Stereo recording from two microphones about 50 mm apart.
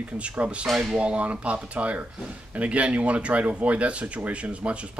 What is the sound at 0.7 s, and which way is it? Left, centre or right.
Speech, centre.